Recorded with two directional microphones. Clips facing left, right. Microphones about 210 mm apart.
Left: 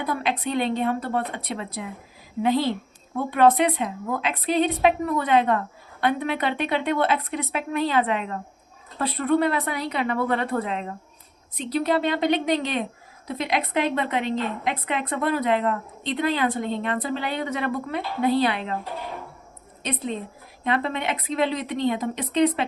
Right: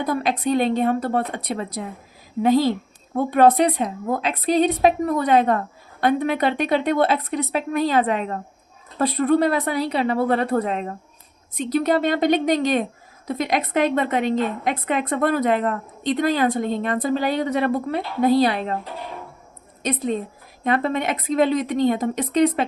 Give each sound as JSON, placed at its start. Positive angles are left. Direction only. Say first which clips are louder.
{"t": 0.0, "sound": "a woman's voice", "louder": "right 4 dB", "side_deg": -40}
{"t": 19.8, "sound": "a woman's voice", "louder": "right 5 dB", "side_deg": -45}